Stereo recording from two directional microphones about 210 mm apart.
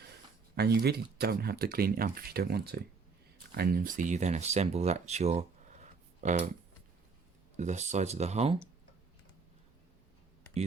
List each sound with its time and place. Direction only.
0.5 s speech: 50° right (ahead or behind)
7.5 s speech: 35° right (ahead or behind)